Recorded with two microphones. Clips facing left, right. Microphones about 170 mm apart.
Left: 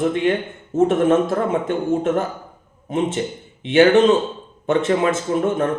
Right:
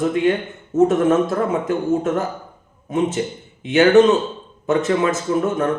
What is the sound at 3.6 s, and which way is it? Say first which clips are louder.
A man's voice: right 1 dB; 30° left (ahead or behind).